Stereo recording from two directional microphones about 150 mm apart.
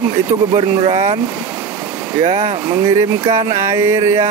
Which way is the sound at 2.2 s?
35° right (ahead or behind).